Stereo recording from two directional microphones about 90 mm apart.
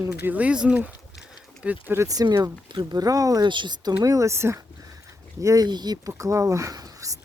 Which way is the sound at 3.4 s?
60° right (ahead or behind).